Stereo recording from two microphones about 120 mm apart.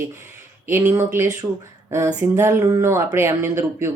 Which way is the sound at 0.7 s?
20° right (ahead or behind).